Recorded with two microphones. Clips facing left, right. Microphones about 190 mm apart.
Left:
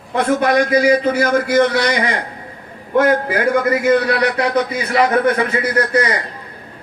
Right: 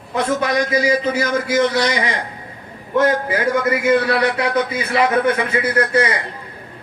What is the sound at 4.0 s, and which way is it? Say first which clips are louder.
A man's voice: left 1 dB; 25° right (ahead or behind).